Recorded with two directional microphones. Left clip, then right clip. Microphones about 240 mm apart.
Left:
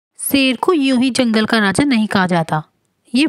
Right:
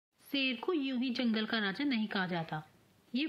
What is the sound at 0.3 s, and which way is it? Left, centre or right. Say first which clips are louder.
Speech: left 19 dB; left.